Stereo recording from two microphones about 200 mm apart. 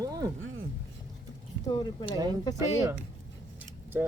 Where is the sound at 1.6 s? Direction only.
20° left (ahead or behind).